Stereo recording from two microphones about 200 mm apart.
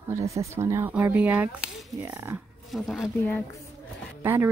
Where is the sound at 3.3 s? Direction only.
15° left (ahead or behind).